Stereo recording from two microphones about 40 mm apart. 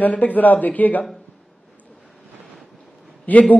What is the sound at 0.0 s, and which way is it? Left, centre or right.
Speech, left.